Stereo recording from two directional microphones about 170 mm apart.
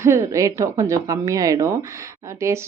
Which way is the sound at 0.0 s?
15° right (ahead or behind).